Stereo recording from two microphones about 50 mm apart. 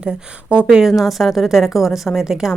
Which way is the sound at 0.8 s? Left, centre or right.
Centre.